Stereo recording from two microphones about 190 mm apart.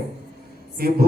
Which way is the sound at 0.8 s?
50° right (ahead or behind).